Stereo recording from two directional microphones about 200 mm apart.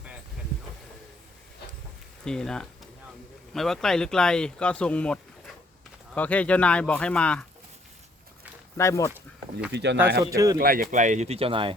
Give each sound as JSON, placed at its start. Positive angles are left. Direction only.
{"t": 2.2, "sound": "speech", "side_deg": 5}
{"t": 8.8, "sound": "speech", "side_deg": 15}
{"t": 9.1, "sound": "a sound", "side_deg": -5}
{"t": 9.7, "sound": "speech", "side_deg": -60}
{"t": 10.2, "sound": "speech", "side_deg": -15}
{"t": 10.6, "sound": "speech", "side_deg": -45}